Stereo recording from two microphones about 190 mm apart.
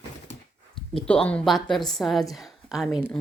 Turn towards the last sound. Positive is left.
turn(degrees=0)  # may be behind; listen again after turning